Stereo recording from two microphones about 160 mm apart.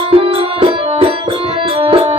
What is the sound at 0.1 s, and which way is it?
Music, 35° right (ahead or behind).